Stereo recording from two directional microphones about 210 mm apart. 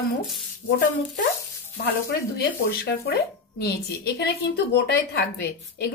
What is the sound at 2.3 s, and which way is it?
Speech, 50° left (ahead or behind).